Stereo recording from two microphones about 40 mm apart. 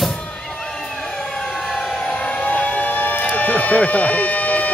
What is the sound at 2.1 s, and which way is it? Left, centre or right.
Siren, left.